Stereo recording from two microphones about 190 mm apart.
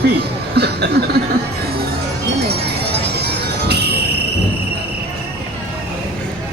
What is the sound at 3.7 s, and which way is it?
Cricket, 60° right (ahead or behind).